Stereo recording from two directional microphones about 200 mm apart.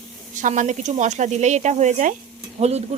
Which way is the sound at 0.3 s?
40° right (ahead or behind).